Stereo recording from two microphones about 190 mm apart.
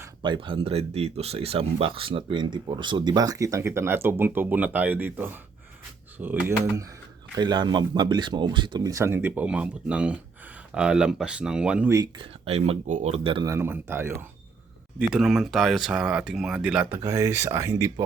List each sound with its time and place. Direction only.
0.2 s speech: 25° right (ahead or behind)
7.3 s speech: 20° right (ahead or behind)
12.1 s speech: 30° right (ahead or behind)
13.5 s speech: 10° right (ahead or behind)